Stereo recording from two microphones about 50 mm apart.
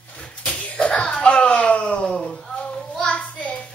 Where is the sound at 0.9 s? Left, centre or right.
Left.